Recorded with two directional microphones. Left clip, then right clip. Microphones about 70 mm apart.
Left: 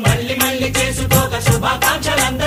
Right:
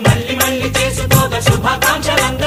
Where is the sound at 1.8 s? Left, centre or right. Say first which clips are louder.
Right 2 dB; right.